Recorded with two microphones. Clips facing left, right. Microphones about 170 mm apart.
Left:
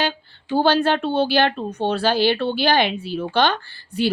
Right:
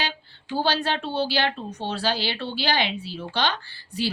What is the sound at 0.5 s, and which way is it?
Speech, 55° left (ahead or behind).